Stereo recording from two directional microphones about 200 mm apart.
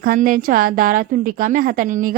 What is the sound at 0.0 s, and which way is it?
A woman's voice, 45° right (ahead or behind).